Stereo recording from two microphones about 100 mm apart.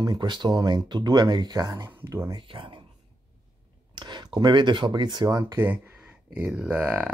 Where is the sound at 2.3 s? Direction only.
55° right (ahead or behind).